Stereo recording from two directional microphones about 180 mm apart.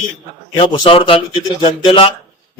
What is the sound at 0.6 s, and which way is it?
A man's voice, 30° left (ahead or behind).